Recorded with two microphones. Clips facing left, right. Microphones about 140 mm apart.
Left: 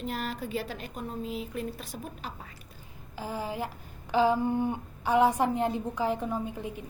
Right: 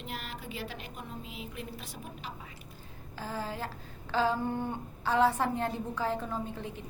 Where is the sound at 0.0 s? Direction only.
40° left (ahead or behind).